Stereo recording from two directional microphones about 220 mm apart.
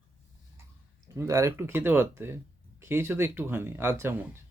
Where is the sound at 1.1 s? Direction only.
15° right (ahead or behind).